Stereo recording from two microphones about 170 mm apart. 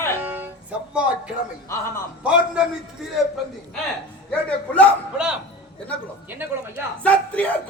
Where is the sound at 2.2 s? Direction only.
5° right (ahead or behind).